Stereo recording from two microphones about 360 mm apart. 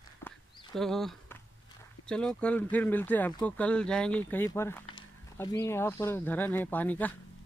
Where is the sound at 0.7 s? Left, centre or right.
Centre.